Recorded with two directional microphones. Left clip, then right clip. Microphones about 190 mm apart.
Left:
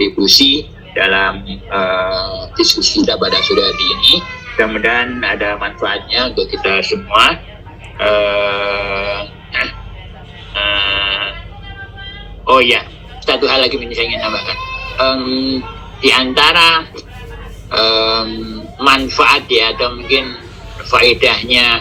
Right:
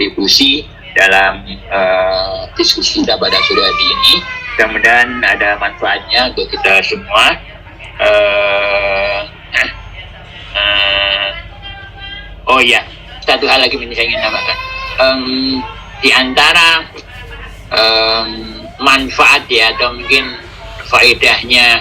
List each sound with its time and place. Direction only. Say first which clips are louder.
0.0 s speech: even; 20° left (ahead or behind)
10.5 s a sound: right 3 dB; 20° left (ahead or behind)
12.5 s speech: right 1 dB; 20° left (ahead or behind)